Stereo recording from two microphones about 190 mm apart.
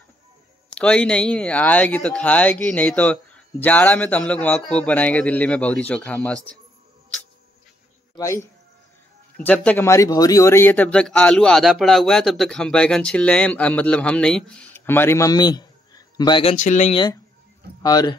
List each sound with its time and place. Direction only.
0.7 s speech: 5° left (ahead or behind)
8.2 s speech: 15° left (ahead or behind)
16.5 s speech: 40° left (ahead or behind)
16.9 s speech: 25° left (ahead or behind)